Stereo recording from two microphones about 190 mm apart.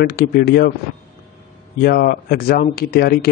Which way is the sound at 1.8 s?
55° left (ahead or behind).